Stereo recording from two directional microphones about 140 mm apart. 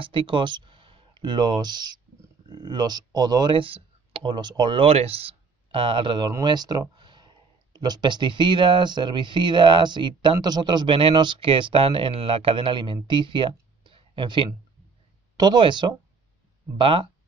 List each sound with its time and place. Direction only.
0.0 s speech: 40° right (ahead or behind)